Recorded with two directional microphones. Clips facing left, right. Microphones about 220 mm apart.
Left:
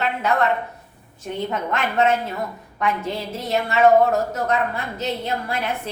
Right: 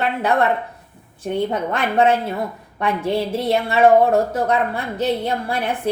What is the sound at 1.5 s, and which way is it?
A woman's voice, 30° right (ahead or behind).